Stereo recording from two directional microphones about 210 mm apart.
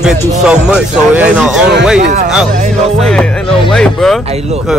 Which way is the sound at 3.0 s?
5° left (ahead or behind).